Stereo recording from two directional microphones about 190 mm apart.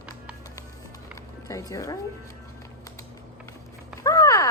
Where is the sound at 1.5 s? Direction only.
15° left (ahead or behind).